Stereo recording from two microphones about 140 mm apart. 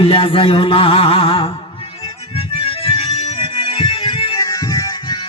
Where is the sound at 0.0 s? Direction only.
40° left (ahead or behind).